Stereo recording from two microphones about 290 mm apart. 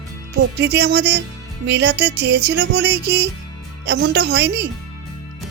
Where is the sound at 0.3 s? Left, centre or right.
Right.